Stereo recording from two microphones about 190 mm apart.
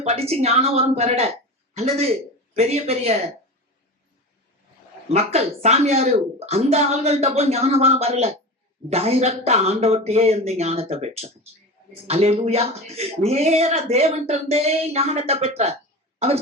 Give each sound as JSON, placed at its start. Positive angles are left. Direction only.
{"t": 0.0, "sound": "a woman's voice", "side_deg": -35}
{"t": 5.1, "sound": "speech", "side_deg": -35}